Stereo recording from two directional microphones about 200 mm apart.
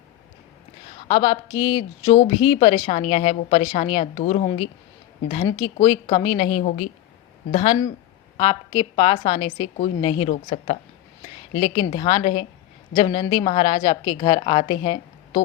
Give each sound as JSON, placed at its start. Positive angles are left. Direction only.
{"t": 1.0, "sound": "a woman's voice", "side_deg": 25}
{"t": 11.6, "sound": "a woman's voice", "side_deg": 25}